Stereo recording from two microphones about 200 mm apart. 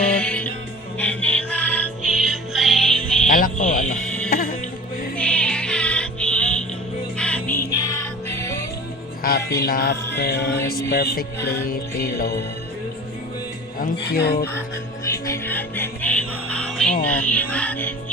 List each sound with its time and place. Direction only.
0.0 s music: 5° left (ahead or behind)
3.2 s music: 45° left (ahead or behind)
4.0 s music: 5° left (ahead or behind)
4.3 s music: 45° left (ahead or behind)
5.1 s music: 5° left (ahead or behind)
9.2 s music: 50° left (ahead or behind)
13.7 s music: 45° left (ahead or behind)
15.3 s music: 10° left (ahead or behind)